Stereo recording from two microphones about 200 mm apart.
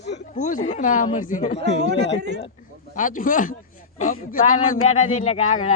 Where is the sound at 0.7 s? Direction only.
40° left (ahead or behind).